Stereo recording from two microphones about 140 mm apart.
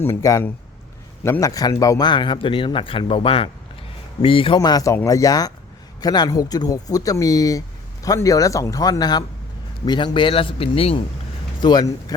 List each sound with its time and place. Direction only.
0.0 s speech: 20° left (ahead or behind); by 11.0 s 45° left (ahead or behind)
11.6 s speech: 30° left (ahead or behind)